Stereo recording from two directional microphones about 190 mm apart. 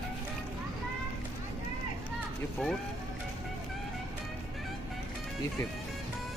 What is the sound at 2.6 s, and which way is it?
Speech, 5° left (ahead or behind).